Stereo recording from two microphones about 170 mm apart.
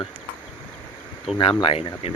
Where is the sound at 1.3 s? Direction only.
30° left (ahead or behind).